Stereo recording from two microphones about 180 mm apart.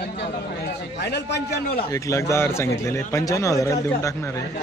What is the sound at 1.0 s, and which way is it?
Speech, 70° left (ahead or behind).